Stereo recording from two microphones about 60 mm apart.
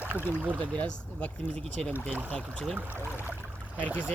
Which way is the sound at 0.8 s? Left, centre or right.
Left.